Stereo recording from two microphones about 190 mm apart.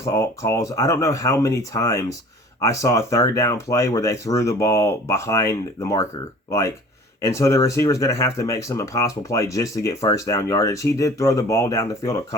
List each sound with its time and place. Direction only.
0.0 s speech: 15° left (ahead or behind)